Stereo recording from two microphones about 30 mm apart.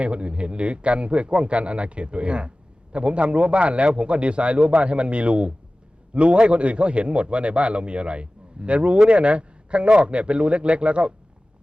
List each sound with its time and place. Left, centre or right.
0.0 s a man's voice: right